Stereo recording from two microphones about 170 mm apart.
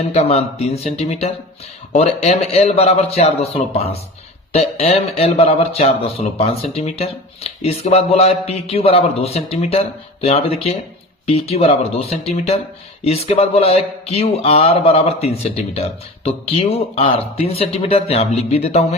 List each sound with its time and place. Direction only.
0.1 s a man's voice: 40° left (ahead or behind)